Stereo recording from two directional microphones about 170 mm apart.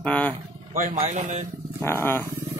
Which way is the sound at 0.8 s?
45° right (ahead or behind).